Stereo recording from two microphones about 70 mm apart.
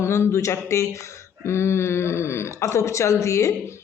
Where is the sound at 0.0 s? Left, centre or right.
Left.